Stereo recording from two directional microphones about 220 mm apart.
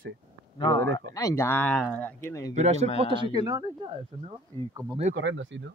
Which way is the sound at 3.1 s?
20° right (ahead or behind).